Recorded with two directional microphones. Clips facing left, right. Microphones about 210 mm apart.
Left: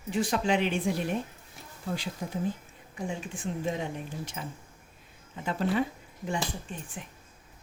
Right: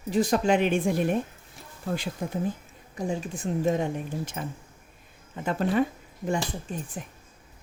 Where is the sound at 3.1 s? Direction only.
40° right (ahead or behind).